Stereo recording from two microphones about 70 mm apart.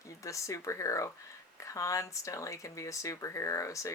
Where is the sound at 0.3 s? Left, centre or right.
Left.